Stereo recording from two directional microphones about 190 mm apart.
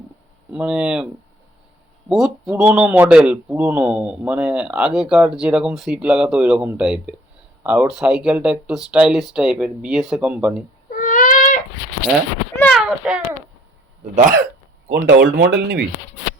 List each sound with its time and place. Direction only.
0.5 s a man's voice: 5° right (ahead or behind)
2.0 s a man's voice: centre (ahead or behind)
10.8 s owl: 45° left (ahead or behind)
12.5 s a sound: 5° left (ahead or behind)
14.8 s speech: 55° right (ahead or behind)